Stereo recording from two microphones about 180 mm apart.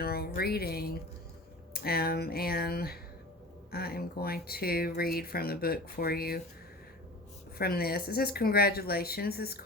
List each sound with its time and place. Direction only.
0.0 s speech: 60° left (ahead or behind)
7.6 s speech: 60° left (ahead or behind)